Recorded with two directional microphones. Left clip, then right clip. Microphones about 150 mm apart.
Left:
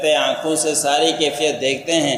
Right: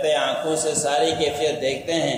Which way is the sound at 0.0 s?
25° left (ahead or behind).